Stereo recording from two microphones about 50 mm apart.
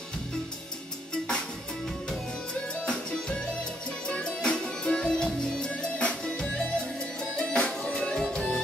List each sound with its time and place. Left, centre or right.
1.1 s music: centre
2.7 s music: centre